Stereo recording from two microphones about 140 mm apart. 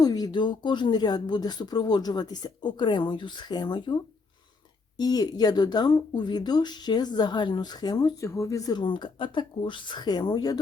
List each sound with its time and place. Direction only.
0.0 s speech: 25° left (ahead or behind)